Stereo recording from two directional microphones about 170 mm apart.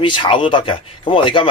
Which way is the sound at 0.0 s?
30° left (ahead or behind).